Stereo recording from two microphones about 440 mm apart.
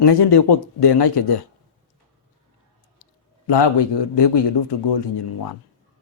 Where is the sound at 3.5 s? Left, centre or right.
Left.